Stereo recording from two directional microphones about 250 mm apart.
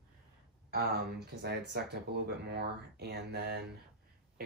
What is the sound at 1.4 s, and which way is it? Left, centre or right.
Speech, right.